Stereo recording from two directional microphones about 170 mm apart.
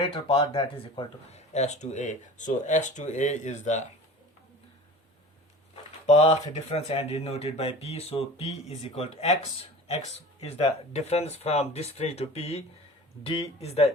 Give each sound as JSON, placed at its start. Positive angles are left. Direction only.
{"t": 0.0, "sound": "speech", "side_deg": 30}
{"t": 1.5, "sound": "speech", "side_deg": 40}
{"t": 5.7, "sound": "a sound", "side_deg": 35}
{"t": 6.7, "sound": "speech", "side_deg": 35}